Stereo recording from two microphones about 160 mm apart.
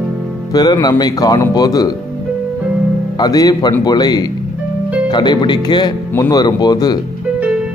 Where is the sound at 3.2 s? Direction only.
25° left (ahead or behind).